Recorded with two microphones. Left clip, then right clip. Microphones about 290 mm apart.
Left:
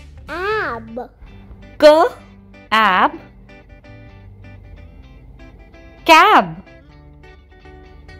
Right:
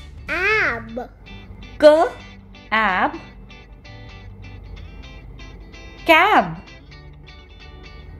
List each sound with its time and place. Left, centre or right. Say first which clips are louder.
0.3 s music: right 2 dB; centre
1.0 s music: right 1 dB; centre
1.8 s speech: left 3 dB; centre
3.1 s music: left 1 dB; centre
5.4 s music: even; centre
6.0 s speech: left 4 dB; left